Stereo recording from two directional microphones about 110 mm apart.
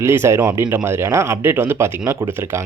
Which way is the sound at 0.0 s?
25° right (ahead or behind).